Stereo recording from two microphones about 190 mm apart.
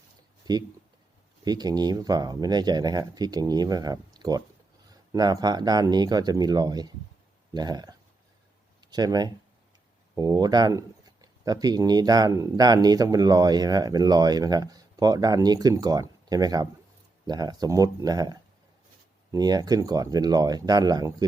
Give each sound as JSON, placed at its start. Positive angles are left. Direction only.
{"t": 0.4, "sound": "speech", "side_deg": -20}